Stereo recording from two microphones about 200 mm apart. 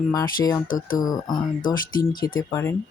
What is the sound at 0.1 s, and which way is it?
Speech, 15° left (ahead or behind).